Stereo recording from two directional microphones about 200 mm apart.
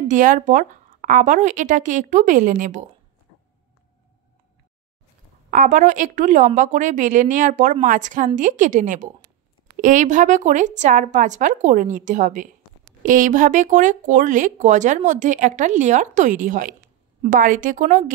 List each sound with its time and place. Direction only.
0.1 s speech: 40° right (ahead or behind)
5.5 s speech: 40° right (ahead or behind)